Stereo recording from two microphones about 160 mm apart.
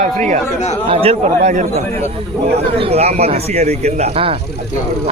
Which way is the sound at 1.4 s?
55° right (ahead or behind).